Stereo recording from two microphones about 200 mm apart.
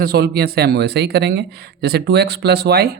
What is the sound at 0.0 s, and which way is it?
Speech, 50° right (ahead or behind).